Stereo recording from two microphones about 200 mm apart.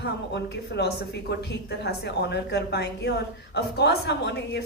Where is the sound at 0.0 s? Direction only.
55° left (ahead or behind).